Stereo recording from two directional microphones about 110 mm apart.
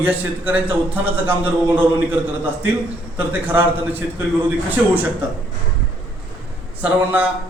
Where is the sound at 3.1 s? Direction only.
20° right (ahead or behind).